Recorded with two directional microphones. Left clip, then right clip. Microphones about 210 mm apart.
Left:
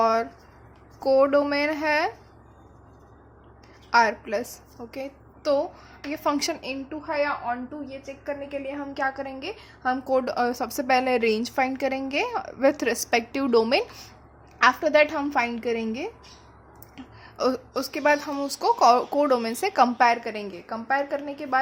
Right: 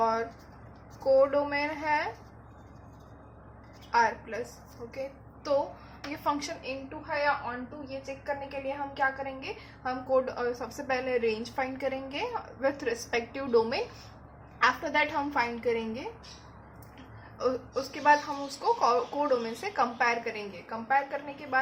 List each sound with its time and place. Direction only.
0.0 s a sound: 55° left (ahead or behind)
1.0 s a woman's voice: 55° left (ahead or behind)
3.9 s a woman's voice: 55° left (ahead or behind)
6.2 s a woman's voice: 50° left (ahead or behind)
7.1 s a woman's voice: 40° left (ahead or behind)
17.3 s a woman's voice: 55° left (ahead or behind)